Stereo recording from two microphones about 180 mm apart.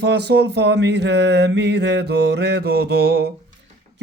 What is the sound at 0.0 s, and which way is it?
Mantra, 70° right (ahead or behind).